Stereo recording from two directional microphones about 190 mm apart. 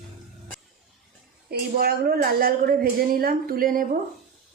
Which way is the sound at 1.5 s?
55° right (ahead or behind).